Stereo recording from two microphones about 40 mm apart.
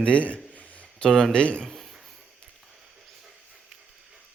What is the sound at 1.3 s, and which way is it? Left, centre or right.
Speech, left.